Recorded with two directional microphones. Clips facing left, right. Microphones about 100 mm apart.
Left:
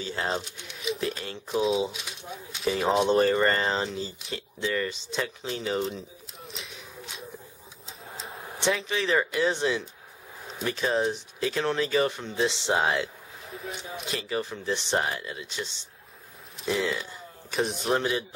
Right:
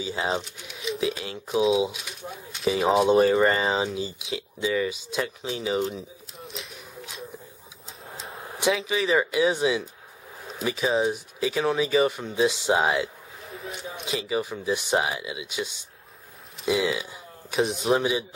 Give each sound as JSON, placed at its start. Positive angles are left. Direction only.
{"t": 0.0, "sound": "speech", "side_deg": -10}